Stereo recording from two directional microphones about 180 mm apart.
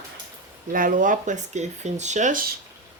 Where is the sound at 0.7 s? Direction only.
50° right (ahead or behind).